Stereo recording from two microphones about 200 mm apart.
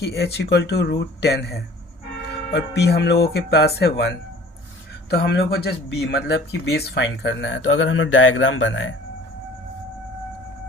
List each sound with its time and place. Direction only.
0.0 s speech: 55° left (ahead or behind)
5.1 s speech: 55° left (ahead or behind); by 8.9 s 70° left (ahead or behind)